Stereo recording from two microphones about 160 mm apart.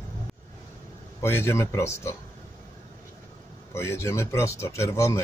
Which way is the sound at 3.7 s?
15° left (ahead or behind).